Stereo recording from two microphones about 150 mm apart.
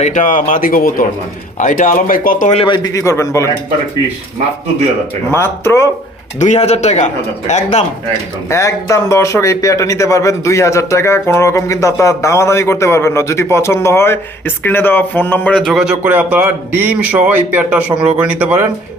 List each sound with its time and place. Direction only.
0.0 s speech: 55° left (ahead or behind)
1.5 s speech: 55° left (ahead or behind)
2.5 s a man's voice: 35° left (ahead or behind); by 3.5 s 20° left (ahead or behind)
5.3 s a man's voice: 15° left (ahead or behind)
6.4 s speech: 50° left (ahead or behind)
8.4 s a man's voice: 20° left (ahead or behind); by 18.6 s 10° right (ahead or behind)